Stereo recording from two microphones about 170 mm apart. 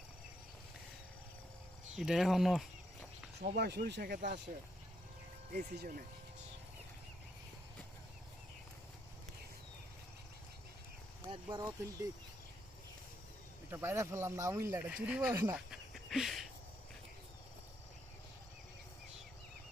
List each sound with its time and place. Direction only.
2.0 s speech: centre (ahead or behind)
3.6 s speech: 70° right (ahead or behind)
5.5 s speech: 55° right (ahead or behind)
11.2 s speech: 25° right (ahead or behind)
13.7 s speech: 15° right (ahead or behind)
15.5 s a sound: centre (ahead or behind)